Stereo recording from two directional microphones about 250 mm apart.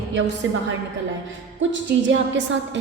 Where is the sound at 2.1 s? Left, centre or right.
Right.